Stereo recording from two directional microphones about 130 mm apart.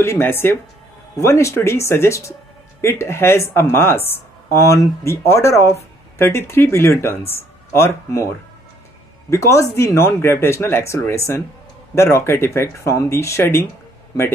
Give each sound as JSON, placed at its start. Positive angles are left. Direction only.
{"t": 0.0, "sound": "speech", "side_deg": 20}
{"t": 9.3, "sound": "speech", "side_deg": 25}